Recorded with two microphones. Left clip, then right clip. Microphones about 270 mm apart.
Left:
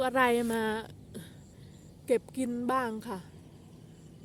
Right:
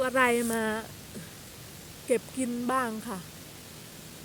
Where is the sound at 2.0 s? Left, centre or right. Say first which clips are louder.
Right 1 dB; centre.